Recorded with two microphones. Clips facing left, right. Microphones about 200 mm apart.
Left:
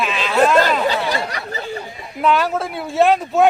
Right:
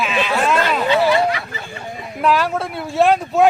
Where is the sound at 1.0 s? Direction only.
40° left (ahead or behind).